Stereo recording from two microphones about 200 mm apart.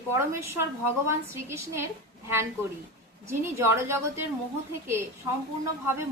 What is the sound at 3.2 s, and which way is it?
Speech, 10° right (ahead or behind).